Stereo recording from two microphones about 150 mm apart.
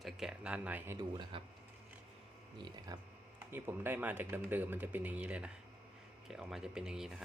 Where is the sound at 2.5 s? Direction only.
30° right (ahead or behind).